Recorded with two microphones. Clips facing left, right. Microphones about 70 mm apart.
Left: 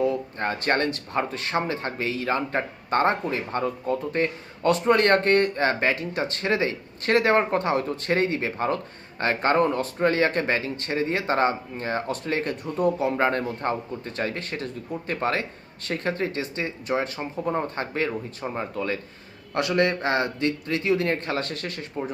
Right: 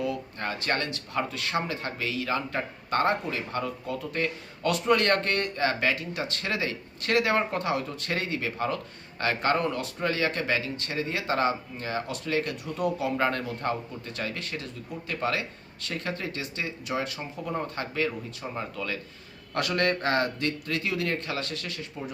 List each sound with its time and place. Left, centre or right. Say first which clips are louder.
0.0 s speech: left 6 dB; left
19.5 s speech: left 4 dB; centre; by 22.1 s left